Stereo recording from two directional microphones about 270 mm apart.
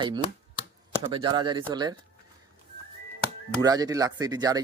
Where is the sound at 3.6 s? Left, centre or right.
Centre.